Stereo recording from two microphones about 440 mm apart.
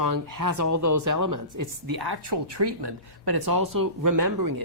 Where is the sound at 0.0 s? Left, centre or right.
Right.